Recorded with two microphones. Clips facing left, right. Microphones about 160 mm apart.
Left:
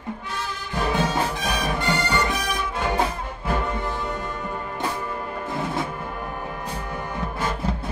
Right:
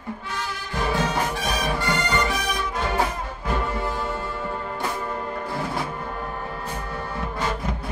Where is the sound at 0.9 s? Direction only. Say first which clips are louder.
Left 1 dB; 20° left (ahead or behind).